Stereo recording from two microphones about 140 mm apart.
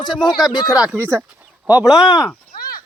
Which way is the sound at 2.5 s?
90° left.